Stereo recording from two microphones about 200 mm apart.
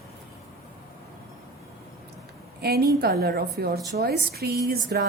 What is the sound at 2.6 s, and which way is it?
A woman's voice, 50° right (ahead or behind).